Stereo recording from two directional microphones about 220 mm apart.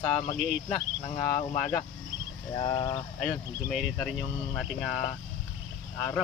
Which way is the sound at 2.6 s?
20° left (ahead or behind).